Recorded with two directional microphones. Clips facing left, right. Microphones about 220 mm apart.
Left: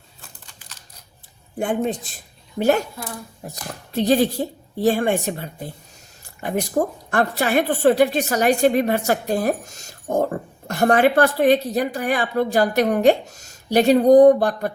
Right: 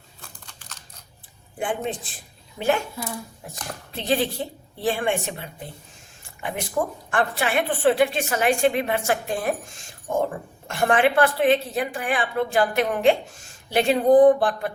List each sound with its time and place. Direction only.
0.3 s computer keyboard: 5° left (ahead or behind)
1.5 s a woman's voice: 40° left (ahead or behind)